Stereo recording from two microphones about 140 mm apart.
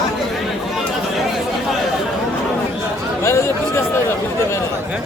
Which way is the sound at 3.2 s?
20° left (ahead or behind).